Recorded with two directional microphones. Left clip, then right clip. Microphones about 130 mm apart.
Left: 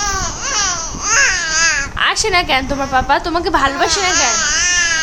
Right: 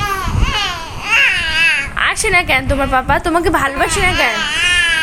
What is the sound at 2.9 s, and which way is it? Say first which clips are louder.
Speech: even; 25° right (ahead or behind).